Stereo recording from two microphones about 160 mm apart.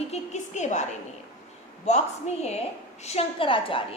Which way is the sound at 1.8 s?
45° left (ahead or behind).